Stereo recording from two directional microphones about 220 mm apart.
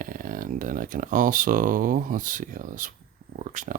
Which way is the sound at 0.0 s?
40° right (ahead or behind).